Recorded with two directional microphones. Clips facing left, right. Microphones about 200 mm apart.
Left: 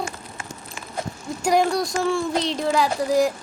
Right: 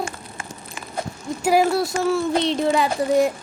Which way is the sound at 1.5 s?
5° right (ahead or behind).